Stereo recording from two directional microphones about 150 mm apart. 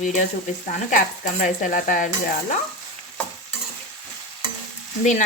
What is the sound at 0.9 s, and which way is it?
Sizzle, 65° left (ahead or behind).